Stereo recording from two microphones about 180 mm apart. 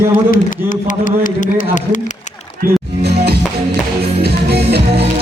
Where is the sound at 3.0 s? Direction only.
60° right (ahead or behind).